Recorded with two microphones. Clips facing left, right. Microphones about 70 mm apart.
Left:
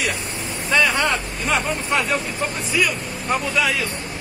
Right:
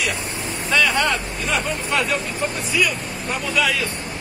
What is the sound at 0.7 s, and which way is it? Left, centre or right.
Vehicle, left.